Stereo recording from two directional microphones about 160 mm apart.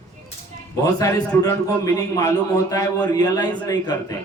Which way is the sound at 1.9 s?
20° left (ahead or behind).